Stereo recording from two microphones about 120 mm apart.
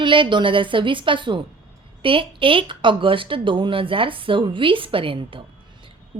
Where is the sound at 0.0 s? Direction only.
40° right (ahead or behind).